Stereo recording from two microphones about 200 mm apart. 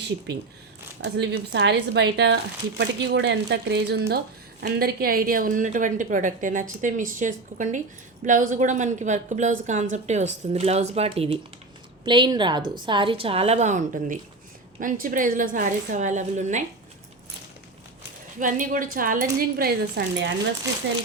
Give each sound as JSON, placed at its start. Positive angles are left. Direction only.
{"t": 1.0, "sound": "a woman's voice", "side_deg": -60}
{"t": 18.3, "sound": "a woman's voice", "side_deg": -40}